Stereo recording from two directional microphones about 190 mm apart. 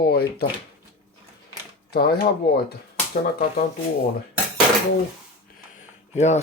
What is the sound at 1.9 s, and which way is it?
Speech, 55° left (ahead or behind).